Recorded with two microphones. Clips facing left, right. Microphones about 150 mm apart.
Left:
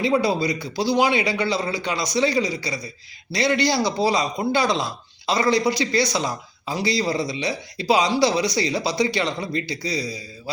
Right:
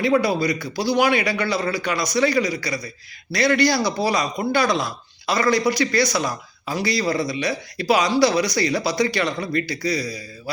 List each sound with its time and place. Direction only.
0.0 s a man's voice: 25° left (ahead or behind)